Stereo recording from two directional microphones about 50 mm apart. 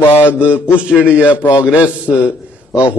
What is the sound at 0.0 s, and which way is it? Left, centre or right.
Mantra, left.